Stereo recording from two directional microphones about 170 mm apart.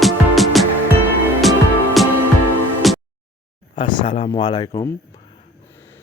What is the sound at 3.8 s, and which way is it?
Speech, 30° left (ahead or behind).